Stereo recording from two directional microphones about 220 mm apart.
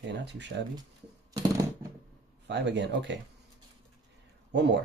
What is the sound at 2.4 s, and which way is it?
Speech, 55° right (ahead or behind).